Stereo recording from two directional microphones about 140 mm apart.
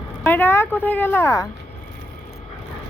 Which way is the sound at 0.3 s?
15° left (ahead or behind).